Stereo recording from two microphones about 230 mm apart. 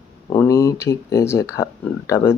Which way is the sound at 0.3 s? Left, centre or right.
Centre.